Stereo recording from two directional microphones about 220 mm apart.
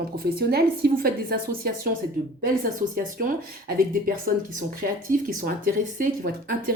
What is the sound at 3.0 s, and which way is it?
Speech, 40° right (ahead or behind).